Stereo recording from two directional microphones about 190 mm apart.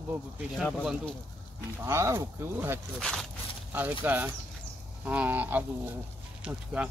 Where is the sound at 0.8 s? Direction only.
5° right (ahead or behind).